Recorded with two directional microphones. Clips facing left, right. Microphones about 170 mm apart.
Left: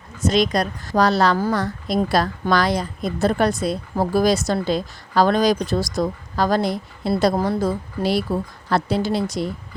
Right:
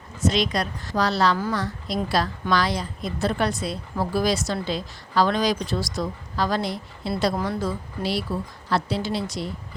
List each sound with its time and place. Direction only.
0.3 s a woman's voice: 45° left (ahead or behind)